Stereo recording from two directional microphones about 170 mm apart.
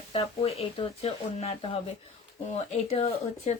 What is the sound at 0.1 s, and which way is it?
Speech, 35° left (ahead or behind).